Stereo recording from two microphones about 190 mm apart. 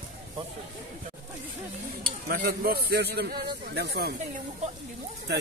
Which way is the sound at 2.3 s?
50° right (ahead or behind).